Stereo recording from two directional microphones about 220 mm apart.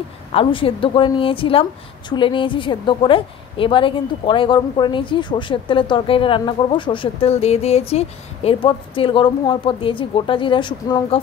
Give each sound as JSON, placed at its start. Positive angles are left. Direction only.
{"t": 0.3, "sound": "a woman's voice", "side_deg": 25}